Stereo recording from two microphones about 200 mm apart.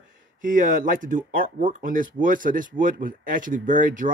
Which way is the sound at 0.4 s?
40° right (ahead or behind).